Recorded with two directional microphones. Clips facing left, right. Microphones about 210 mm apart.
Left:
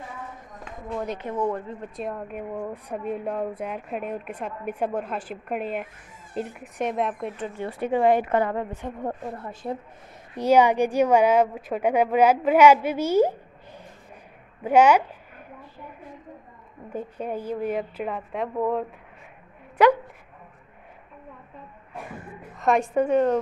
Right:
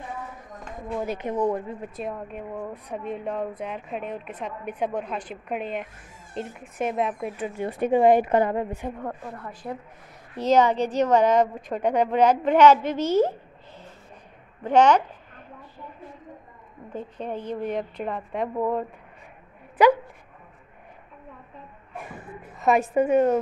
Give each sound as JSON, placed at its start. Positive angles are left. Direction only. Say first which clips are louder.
{"t": 0.8, "sound": "a woman's voice", "louder": "right 2 dB", "side_deg": -10}
{"t": 9.0, "sound": "a woman's voice", "louder": "left 3 dB", "side_deg": 25}
{"t": 10.3, "sound": "a woman's voice", "louder": "left 1 dB", "side_deg": 10}
{"t": 14.6, "sound": "a woman's voice", "louder": "left 1 dB", "side_deg": 10}
{"t": 16.9, "sound": "a woman's voice", "louder": "left 2 dB", "side_deg": 10}
{"t": 22.6, "sound": "speech", "louder": "right 1 dB", "side_deg": -5}